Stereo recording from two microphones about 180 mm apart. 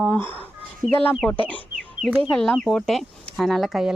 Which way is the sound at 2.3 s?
5° left (ahead or behind).